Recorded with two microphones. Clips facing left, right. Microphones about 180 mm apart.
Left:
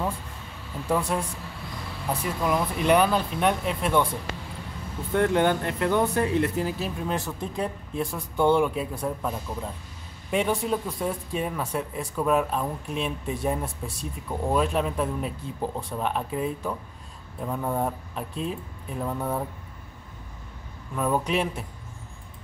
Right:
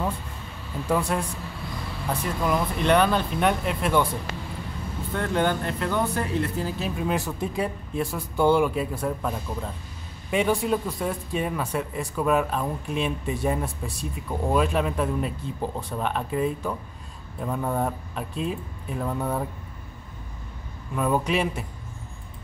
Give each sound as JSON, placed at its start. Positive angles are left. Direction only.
{"t": 0.8, "sound": "speech", "side_deg": 5}
{"t": 5.1, "sound": "speech", "side_deg": 20}
{"t": 6.8, "sound": "speech", "side_deg": -5}
{"t": 20.9, "sound": "speech", "side_deg": -5}